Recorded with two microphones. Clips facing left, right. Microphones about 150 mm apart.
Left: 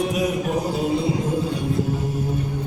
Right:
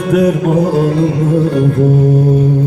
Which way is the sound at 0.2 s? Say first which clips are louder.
Right 11 dB; 70° right (ahead or behind).